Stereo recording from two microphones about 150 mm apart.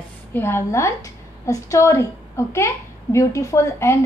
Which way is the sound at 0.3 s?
15° left (ahead or behind).